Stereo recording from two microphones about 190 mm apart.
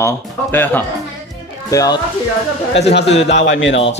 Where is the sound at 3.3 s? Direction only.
75° left (ahead or behind).